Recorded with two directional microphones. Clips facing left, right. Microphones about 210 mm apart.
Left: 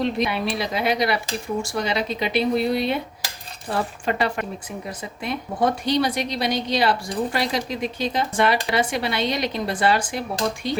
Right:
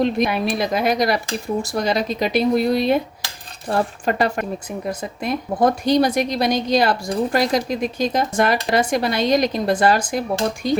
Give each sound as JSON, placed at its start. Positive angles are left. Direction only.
{"t": 0.0, "sound": "speech", "side_deg": -45}